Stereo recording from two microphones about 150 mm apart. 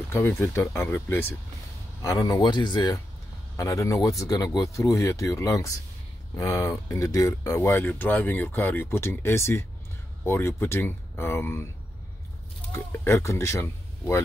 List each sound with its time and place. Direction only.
0.1 s speech: 15° left (ahead or behind)
12.7 s speech: 15° left (ahead or behind)